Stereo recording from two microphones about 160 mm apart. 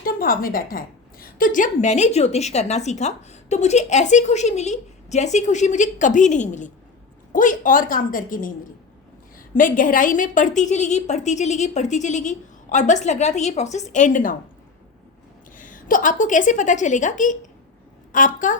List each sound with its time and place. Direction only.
0.0 s a woman's voice: 65° left (ahead or behind)
9.6 s a woman's voice: 55° left (ahead or behind)
15.5 s a woman's voice: 55° left (ahead or behind)